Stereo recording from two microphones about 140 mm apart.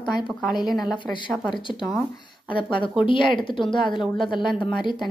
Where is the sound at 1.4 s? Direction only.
35° left (ahead or behind).